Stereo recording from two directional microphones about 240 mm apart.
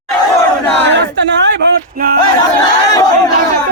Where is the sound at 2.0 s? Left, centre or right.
Right.